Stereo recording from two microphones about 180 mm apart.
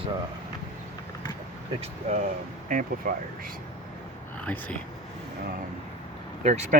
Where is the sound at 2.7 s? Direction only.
50° right (ahead or behind).